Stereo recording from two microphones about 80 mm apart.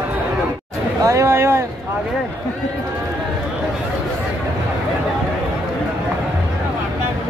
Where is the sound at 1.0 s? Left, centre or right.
Right.